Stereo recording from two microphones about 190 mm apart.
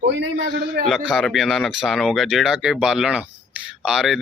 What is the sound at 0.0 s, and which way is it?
Speech, 70° right (ahead or behind).